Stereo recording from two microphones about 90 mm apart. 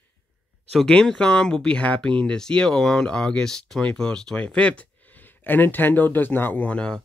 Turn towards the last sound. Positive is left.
turn(degrees=10)  # may be behind; listen again after turning